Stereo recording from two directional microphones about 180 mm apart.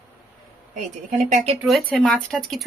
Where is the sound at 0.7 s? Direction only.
45° right (ahead or behind).